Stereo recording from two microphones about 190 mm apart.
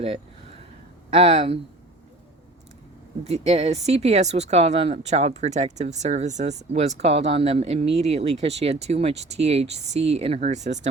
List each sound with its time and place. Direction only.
1.1 s speech: 30° right (ahead or behind)
3.2 s speech: 35° right (ahead or behind)